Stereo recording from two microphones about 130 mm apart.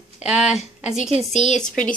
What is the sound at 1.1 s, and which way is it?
Speech, 50° right (ahead or behind).